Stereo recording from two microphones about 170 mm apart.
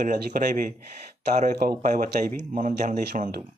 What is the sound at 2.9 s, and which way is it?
Speech, 65° right (ahead or behind).